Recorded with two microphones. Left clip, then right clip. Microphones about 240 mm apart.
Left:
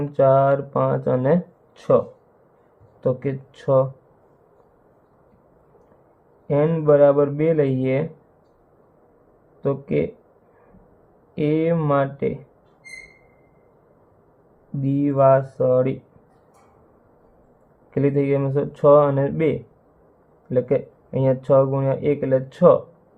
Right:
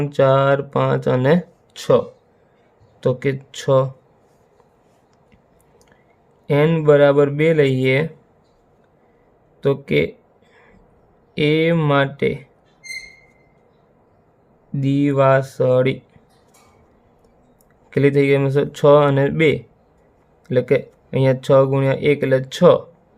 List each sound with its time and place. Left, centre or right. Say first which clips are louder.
0.0 s speech: right 1 dB; right
3.0 s speech: right 3 dB; right
6.5 s speech: right 3 dB; right
9.8 s speech: right 3 dB; right
11.3 s speech: right 4 dB; right
14.8 s speech: right 2 dB; right
17.9 s speech: right 5 dB; right